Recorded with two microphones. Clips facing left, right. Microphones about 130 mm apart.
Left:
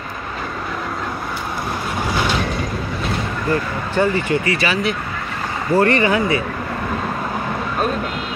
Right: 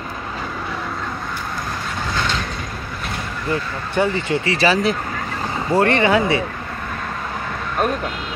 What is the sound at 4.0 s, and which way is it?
Speech, 20° right (ahead or behind).